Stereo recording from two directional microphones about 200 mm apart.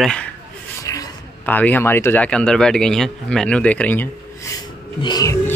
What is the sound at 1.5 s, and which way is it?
Speech, 10° left (ahead or behind).